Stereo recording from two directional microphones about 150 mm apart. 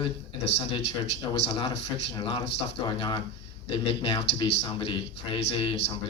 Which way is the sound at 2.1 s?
30° left (ahead or behind).